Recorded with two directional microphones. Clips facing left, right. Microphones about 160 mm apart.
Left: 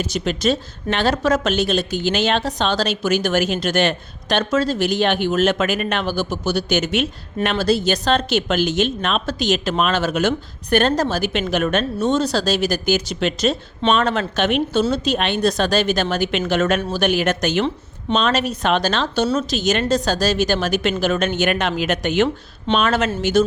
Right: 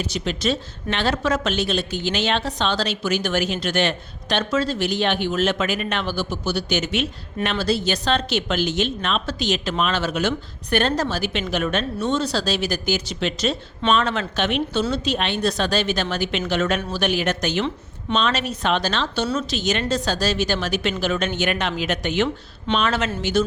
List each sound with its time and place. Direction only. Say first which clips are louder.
0.0 s speech: left 4 dB; 45° left (ahead or behind)